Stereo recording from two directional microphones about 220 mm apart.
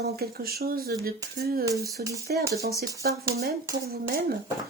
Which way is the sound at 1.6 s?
15° right (ahead or behind).